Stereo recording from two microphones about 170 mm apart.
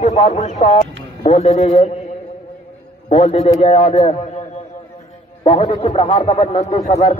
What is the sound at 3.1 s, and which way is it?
A man's voice, 40° left (ahead or behind).